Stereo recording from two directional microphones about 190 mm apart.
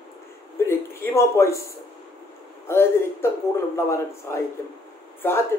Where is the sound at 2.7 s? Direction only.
15° left (ahead or behind).